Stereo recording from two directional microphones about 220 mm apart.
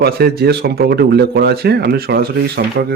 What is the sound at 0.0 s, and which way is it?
Speech, 45° right (ahead or behind).